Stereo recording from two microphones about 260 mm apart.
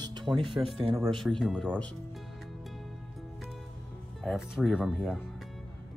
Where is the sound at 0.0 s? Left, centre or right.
Centre.